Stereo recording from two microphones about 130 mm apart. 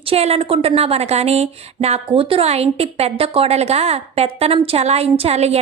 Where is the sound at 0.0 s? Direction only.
50° right (ahead or behind).